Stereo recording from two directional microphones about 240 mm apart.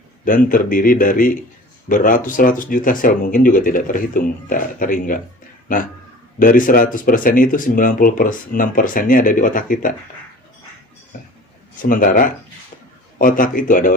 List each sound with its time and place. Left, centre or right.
0.3 s speech: left
11.8 s speech: left